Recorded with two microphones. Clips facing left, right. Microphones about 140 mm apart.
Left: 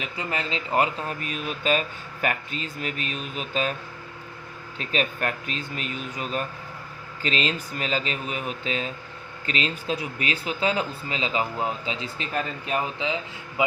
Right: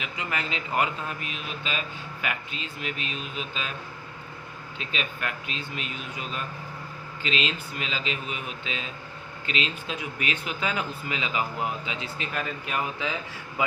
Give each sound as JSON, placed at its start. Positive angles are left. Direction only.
{"t": 0.0, "sound": "speech", "side_deg": 35}
{"t": 4.8, "sound": "speech", "side_deg": 45}
{"t": 13.0, "sound": "a man's voice", "side_deg": 20}